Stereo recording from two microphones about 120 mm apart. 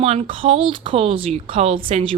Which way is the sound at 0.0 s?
55° right (ahead or behind).